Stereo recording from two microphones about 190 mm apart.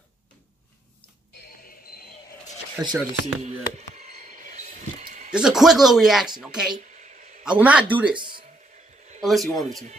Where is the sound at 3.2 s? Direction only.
35° right (ahead or behind).